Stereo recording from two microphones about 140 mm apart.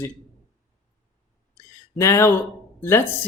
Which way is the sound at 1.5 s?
20° left (ahead or behind).